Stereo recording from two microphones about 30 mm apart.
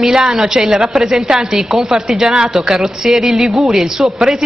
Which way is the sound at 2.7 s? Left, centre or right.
Centre.